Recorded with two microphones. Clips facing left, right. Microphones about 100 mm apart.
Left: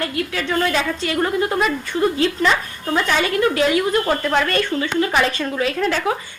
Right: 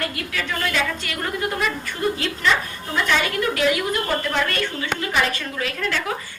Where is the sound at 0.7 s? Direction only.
25° left (ahead or behind).